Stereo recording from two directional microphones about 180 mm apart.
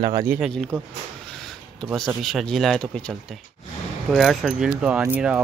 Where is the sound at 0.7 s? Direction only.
5° left (ahead or behind).